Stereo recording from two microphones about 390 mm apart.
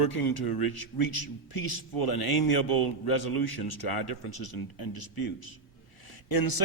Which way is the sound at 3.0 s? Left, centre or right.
Left.